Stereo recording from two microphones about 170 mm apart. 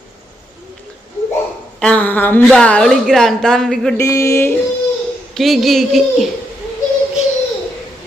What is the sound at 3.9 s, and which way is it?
Speech, 15° left (ahead or behind).